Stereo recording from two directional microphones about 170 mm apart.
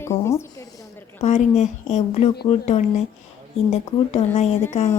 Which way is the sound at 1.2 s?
45° left (ahead or behind).